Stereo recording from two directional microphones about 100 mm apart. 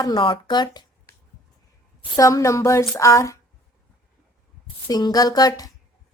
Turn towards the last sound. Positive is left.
turn(degrees=40)  # may be behind; listen again after turning